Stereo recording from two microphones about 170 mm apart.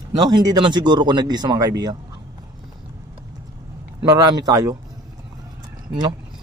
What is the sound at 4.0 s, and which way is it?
Speech, 25° right (ahead or behind).